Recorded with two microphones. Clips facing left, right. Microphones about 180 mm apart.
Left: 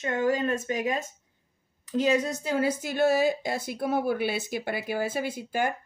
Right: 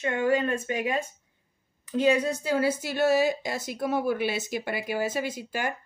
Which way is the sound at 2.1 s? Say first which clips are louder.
Even; 40° left (ahead or behind).